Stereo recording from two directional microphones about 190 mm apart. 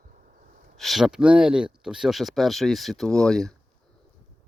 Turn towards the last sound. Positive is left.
turn(degrees=5)  # may be behind; listen again after turning